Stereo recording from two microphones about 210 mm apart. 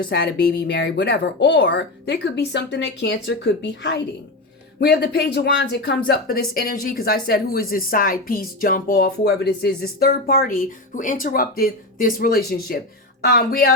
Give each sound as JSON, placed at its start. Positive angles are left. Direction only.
{"t": 0.0, "sound": "a woman's voice", "side_deg": 50}